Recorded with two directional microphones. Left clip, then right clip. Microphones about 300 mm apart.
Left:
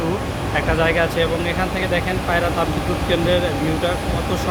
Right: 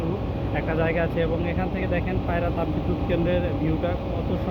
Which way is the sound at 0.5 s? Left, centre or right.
Centre.